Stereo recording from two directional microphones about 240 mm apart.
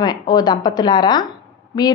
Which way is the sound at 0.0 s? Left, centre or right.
Centre.